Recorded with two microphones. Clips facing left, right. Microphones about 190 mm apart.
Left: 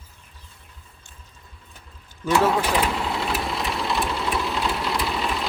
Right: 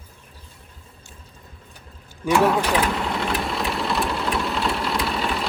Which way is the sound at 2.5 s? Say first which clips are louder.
Right 1 dB; centre (ahead or behind).